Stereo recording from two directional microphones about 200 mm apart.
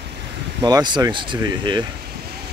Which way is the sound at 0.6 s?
20° right (ahead or behind).